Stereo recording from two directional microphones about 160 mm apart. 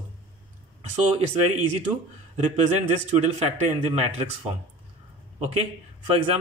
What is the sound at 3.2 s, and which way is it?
Speech, 40° right (ahead or behind).